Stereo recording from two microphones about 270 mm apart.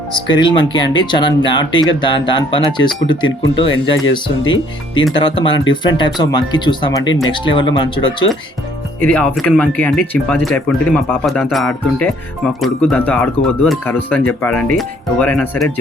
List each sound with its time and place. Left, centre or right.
0.3 s speech: centre
5.1 s speech: centre
9.0 s speech: centre